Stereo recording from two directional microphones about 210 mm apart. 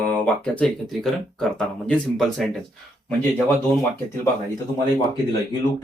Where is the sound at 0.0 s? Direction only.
5° left (ahead or behind).